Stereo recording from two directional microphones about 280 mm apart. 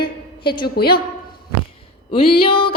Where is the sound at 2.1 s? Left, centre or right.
Centre.